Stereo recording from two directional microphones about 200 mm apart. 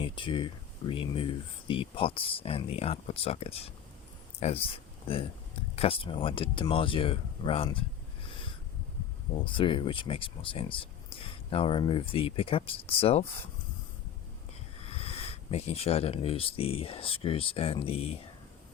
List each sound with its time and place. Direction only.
0.0 s speech: 25° left (ahead or behind)
8.3 s a sound: 25° left (ahead or behind)
9.3 s speech: 25° left (ahead or behind)
14.8 s speech: 30° left (ahead or behind)